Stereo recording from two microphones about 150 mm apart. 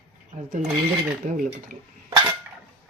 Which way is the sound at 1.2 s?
60° right (ahead or behind).